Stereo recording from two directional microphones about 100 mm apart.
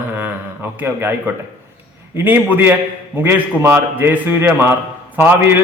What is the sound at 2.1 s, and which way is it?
A man's voice, 20° right (ahead or behind).